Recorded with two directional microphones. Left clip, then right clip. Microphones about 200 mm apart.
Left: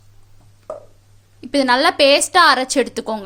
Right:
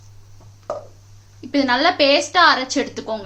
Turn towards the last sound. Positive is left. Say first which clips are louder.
# left 4 dB
turn(degrees=55)  # may be behind; listen again after turning